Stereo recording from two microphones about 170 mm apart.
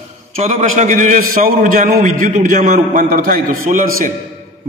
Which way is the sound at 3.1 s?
60° right (ahead or behind).